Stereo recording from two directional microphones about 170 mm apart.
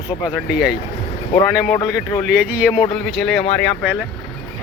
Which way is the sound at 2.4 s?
10° right (ahead or behind).